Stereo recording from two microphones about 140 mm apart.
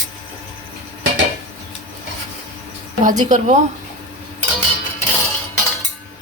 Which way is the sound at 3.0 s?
65° right (ahead or behind).